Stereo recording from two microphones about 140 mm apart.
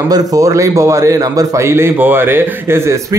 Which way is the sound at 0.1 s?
25° right (ahead or behind).